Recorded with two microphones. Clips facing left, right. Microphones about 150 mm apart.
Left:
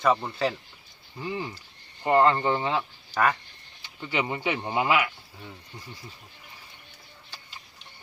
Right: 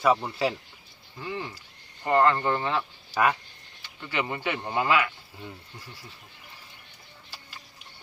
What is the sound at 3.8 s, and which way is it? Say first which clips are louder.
Speech: left 2 dB; 15° left (ahead or behind).